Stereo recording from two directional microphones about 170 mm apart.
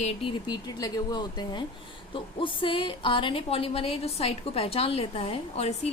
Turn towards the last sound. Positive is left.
turn(degrees=35)  # may be behind; listen again after turning